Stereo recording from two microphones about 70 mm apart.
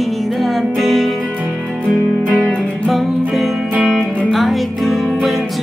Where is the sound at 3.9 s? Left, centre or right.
Centre.